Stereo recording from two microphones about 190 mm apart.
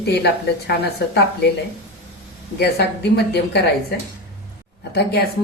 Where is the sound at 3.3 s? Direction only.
60° left (ahead or behind).